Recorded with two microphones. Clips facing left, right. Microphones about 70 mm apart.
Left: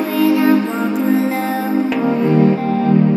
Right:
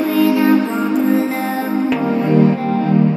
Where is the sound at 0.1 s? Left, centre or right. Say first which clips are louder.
Left 1 dB; centre.